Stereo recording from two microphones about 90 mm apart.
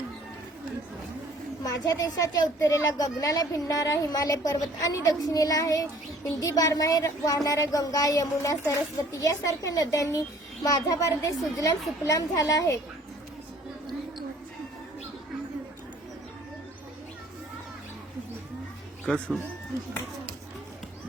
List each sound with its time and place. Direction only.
1.6 s speech: 45° left (ahead or behind)
19.1 s speech: 10° left (ahead or behind)